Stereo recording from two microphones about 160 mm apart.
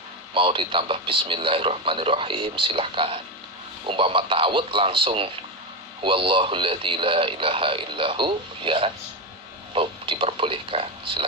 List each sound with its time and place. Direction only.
0.3 s a man's voice: 35° right (ahead or behind)